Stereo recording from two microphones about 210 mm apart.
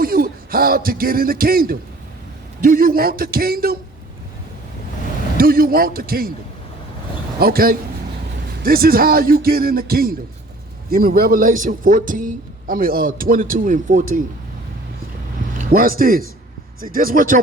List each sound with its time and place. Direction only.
0.0 s a sound: 45° right (ahead or behind)
2.6 s speech: 45° right (ahead or behind)
5.4 s speech: 45° right (ahead or behind)
7.3 s speech: 45° right (ahead or behind)
15.5 s speech: 40° right (ahead or behind)